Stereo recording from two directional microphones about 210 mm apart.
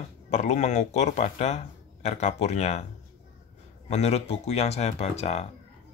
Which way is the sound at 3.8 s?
30° left (ahead or behind).